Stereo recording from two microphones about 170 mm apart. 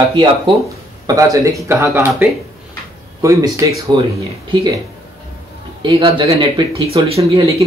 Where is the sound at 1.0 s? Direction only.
20° right (ahead or behind).